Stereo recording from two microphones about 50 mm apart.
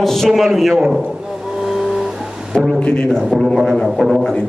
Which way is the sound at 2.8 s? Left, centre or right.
Left.